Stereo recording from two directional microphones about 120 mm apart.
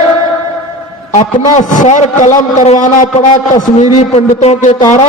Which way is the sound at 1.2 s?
90° left.